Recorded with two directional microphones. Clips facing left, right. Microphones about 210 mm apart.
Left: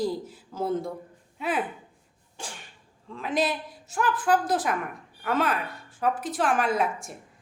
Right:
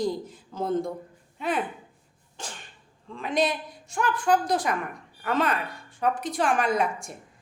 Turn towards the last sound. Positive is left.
turn(degrees=5)  # may be behind; listen again after turning